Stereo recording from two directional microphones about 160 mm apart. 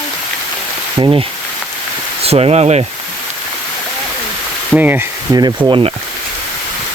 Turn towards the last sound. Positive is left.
turn(degrees=-30)  # may be behind; listen again after turning